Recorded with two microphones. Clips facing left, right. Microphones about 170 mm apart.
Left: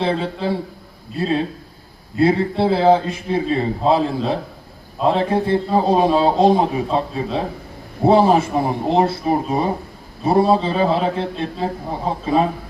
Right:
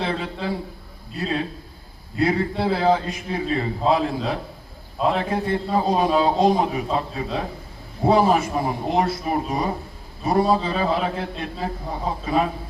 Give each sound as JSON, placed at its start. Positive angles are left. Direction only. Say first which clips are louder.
{"t": 0.0, "sound": "a man's voice", "louder": "left 5 dB", "side_deg": 30}
{"t": 8.0, "sound": "a man's voice", "louder": "left 4 dB", "side_deg": 30}